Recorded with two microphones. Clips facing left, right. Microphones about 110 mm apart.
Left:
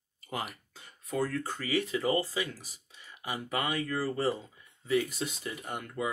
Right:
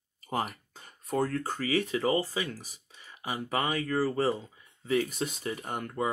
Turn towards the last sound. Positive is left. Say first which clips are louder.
# right 3 dB
turn(degrees=-45)  # may be behind; listen again after turning